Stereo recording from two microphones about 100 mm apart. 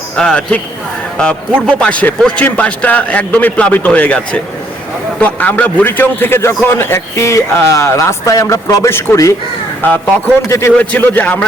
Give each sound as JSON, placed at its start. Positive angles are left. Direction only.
{"t": 0.2, "sound": "a man's voice", "side_deg": 10}